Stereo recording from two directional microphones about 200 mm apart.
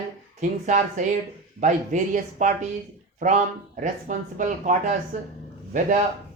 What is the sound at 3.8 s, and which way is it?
Speech, 40° right (ahead or behind).